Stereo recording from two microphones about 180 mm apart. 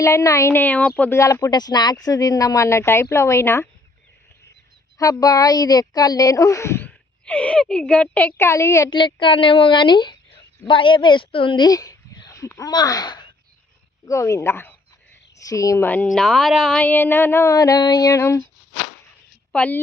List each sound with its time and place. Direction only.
0.0 s speech: 15° left (ahead or behind)
4.9 s speech: 20° left (ahead or behind)
8.9 s a woman's voice: 25° left (ahead or behind); by 16.8 s centre (ahead or behind)
16.8 s speech: 10° left (ahead or behind)
19.5 s speech: 10° left (ahead or behind)